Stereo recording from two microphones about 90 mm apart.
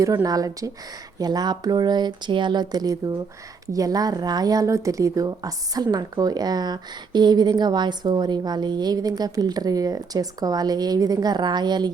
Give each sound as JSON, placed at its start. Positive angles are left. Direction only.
{"t": 0.0, "sound": "speech", "side_deg": -40}